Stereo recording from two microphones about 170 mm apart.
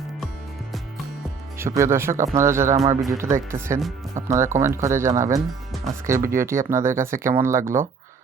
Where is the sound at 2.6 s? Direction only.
40° right (ahead or behind).